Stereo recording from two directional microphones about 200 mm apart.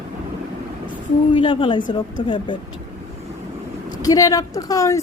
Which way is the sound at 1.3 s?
25° left (ahead or behind).